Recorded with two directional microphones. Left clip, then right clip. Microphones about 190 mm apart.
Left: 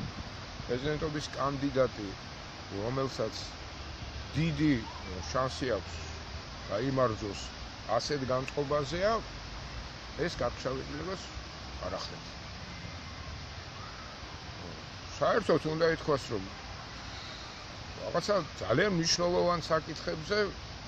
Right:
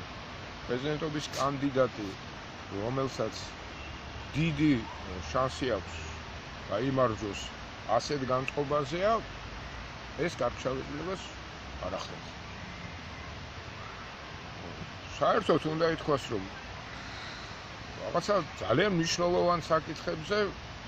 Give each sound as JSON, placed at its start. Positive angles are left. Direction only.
{"t": 0.8, "sound": "speech", "side_deg": 5}
{"t": 2.9, "sound": "speech", "side_deg": 5}
{"t": 4.4, "sound": "speech", "side_deg": 5}
{"t": 10.2, "sound": "speech", "side_deg": -5}
{"t": 15.1, "sound": "speech", "side_deg": 10}
{"t": 18.1, "sound": "speech", "side_deg": 5}